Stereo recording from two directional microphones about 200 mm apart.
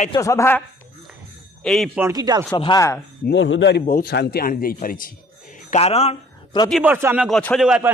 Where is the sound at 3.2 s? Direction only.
70° left (ahead or behind).